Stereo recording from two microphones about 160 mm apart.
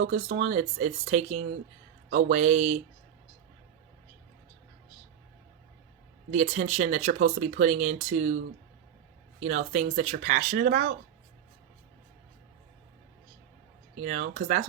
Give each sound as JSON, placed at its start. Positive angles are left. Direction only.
{"t": 0.1, "sound": "speech", "side_deg": -50}
{"t": 6.3, "sound": "speech", "side_deg": -45}
{"t": 9.4, "sound": "speech", "side_deg": -50}
{"t": 14.0, "sound": "speech", "side_deg": -50}